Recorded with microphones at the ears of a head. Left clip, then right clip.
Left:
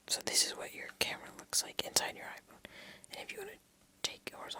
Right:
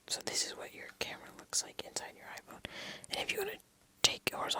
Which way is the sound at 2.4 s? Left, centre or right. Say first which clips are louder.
Right 7 dB; right.